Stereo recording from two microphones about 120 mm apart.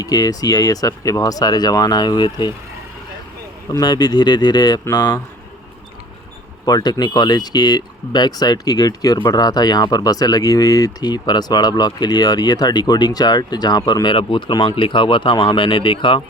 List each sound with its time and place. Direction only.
0.0 s speech: 30° left (ahead or behind)
3.7 s speech: 35° left (ahead or behind)
6.7 s speech: 35° left (ahead or behind)